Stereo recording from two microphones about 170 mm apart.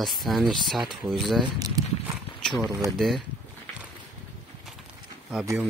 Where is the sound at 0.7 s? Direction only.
25° right (ahead or behind).